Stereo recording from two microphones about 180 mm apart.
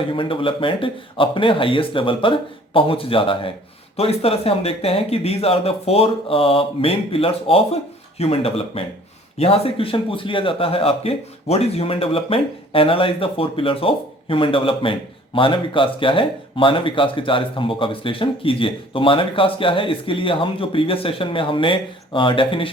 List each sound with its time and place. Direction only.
0.1 s a man's voice: 30° left (ahead or behind)